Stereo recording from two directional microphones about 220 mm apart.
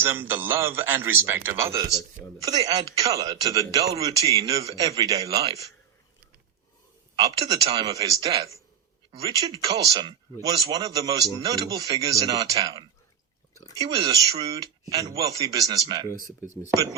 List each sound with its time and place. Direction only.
0.0 s a man's voice: 10° right (ahead or behind)
7.2 s a man's voice: 15° right (ahead or behind)